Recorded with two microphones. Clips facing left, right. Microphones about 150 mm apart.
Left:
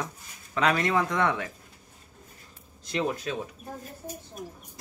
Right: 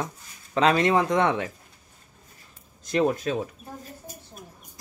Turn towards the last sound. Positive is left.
turn(degrees=-50)  # may be behind; listen again after turning